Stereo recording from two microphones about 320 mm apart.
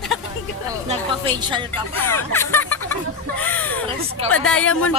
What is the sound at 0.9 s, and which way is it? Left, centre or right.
Speech, centre.